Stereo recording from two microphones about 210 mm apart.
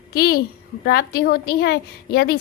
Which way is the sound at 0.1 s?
45° left (ahead or behind).